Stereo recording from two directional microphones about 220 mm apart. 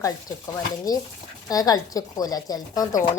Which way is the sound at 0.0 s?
15° left (ahead or behind).